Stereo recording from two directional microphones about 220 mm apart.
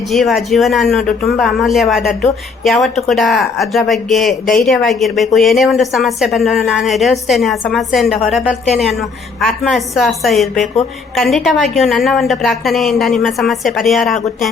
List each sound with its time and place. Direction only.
0.1 s a woman's voice: centre (ahead or behind)